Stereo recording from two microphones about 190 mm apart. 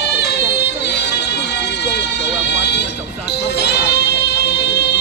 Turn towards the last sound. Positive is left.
turn(degrees=65)  # may be behind; listen again after turning